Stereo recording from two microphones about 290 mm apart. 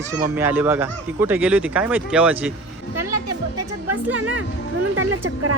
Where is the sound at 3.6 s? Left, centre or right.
Right.